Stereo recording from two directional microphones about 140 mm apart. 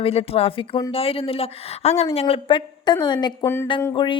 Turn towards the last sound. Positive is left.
turn(degrees=35)  # may be behind; listen again after turning